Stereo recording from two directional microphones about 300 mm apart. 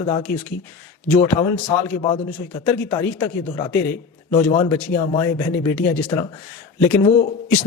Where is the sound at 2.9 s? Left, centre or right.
Centre.